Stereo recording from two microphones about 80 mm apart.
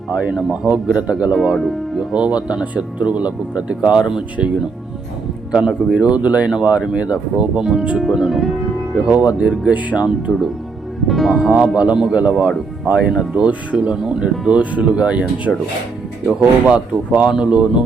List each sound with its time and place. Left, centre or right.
0.1 s speech: centre
1.3 s speech: centre
9.0 s speech: centre
11.0 s speech: centre